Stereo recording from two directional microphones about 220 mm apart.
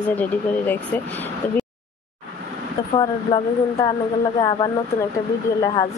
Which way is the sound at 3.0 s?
20° left (ahead or behind).